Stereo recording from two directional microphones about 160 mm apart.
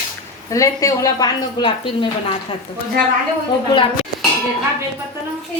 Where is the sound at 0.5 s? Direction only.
20° left (ahead or behind).